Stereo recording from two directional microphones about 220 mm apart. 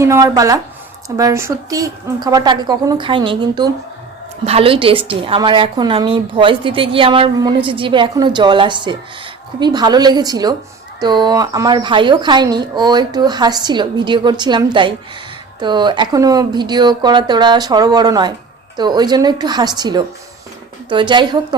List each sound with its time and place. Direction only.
0.0 s a woman's voice: 15° right (ahead or behind)